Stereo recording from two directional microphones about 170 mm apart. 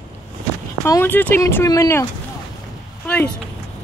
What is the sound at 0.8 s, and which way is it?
Speech, 15° left (ahead or behind).